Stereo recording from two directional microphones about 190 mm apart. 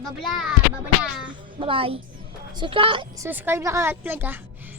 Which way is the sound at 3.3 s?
10° right (ahead or behind).